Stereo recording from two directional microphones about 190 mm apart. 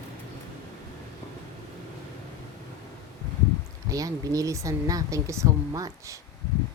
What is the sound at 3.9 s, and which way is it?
Speech, 20° right (ahead or behind).